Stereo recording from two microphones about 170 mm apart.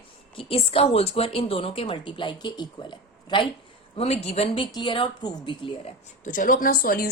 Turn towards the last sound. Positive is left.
turn(degrees=60)  # may be behind; listen again after turning